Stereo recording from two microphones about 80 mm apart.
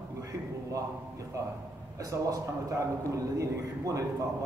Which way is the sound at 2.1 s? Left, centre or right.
Right.